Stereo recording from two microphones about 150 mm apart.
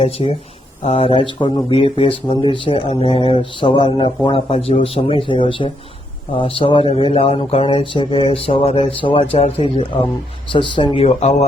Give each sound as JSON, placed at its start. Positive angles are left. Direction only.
{"t": 0.0, "sound": "speech", "side_deg": 40}